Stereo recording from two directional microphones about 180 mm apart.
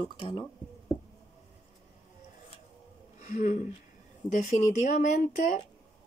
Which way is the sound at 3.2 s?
45° left (ahead or behind).